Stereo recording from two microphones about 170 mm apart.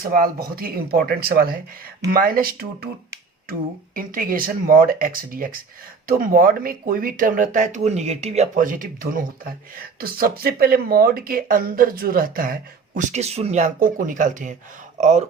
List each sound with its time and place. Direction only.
0.0 s speech: 60° right (ahead or behind)
3.9 s speech: 55° right (ahead or behind)